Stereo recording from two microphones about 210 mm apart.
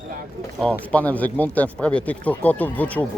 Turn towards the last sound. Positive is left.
turn(degrees=5)  # may be behind; listen again after turning